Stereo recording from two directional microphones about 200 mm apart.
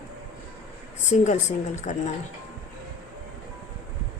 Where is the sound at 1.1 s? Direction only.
35° left (ahead or behind).